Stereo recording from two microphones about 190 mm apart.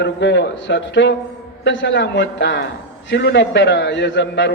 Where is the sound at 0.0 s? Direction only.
65° left (ahead or behind).